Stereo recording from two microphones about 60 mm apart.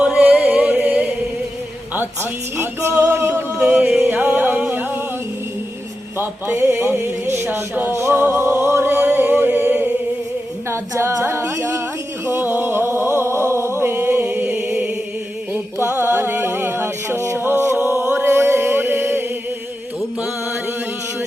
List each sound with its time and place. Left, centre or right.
0.0 s music: right
2.6 s music: right
3.7 s music: right
6.1 s a sound: right
7.9 s music: right
10.7 s singing: right
12.2 s a sound: right
14.3 s music: right
16.0 s music: right